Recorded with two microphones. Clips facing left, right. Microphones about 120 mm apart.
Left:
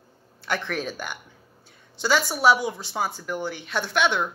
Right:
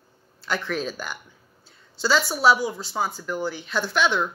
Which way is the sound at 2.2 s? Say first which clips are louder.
Even; 25° left (ahead or behind).